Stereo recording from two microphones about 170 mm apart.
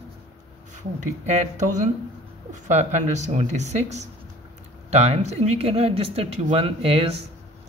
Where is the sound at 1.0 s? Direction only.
45° right (ahead or behind).